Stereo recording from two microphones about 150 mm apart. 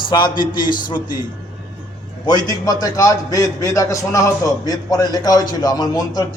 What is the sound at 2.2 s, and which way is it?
A man's voice, 25° left (ahead or behind).